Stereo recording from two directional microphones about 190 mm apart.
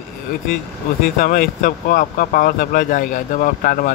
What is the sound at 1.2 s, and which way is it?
Speech, 45° left (ahead or behind).